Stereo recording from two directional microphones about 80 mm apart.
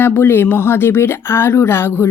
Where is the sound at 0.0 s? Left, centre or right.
Left.